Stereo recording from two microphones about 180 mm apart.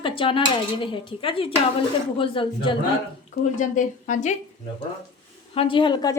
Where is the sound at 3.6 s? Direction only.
45° left (ahead or behind).